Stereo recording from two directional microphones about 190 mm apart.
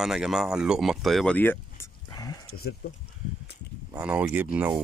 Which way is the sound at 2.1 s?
20° left (ahead or behind).